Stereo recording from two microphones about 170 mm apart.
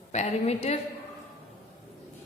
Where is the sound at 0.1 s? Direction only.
40° left (ahead or behind).